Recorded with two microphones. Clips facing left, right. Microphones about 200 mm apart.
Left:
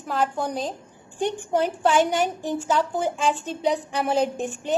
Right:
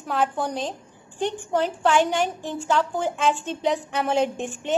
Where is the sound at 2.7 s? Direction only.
5° left (ahead or behind).